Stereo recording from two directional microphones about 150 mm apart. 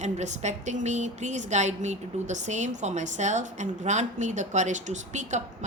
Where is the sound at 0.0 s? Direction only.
50° right (ahead or behind).